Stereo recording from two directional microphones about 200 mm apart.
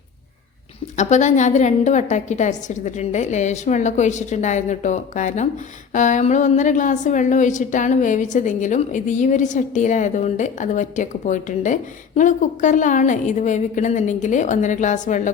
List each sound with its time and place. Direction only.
0.9 s a woman's voice: 35° left (ahead or behind)